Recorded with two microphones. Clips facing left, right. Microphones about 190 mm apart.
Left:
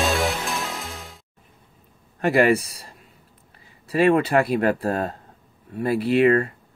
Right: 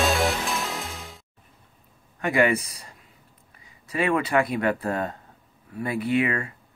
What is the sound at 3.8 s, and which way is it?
Speech, 35° left (ahead or behind).